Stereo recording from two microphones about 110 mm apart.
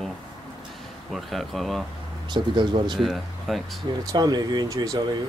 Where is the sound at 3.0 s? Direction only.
Centre (ahead or behind).